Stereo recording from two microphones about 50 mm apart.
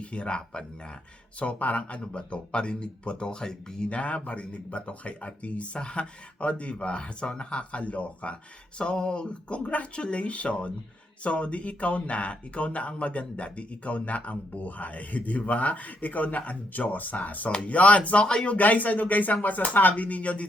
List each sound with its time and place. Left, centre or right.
0.0 s speech: left
3.8 s speech: left
18.5 s speech: left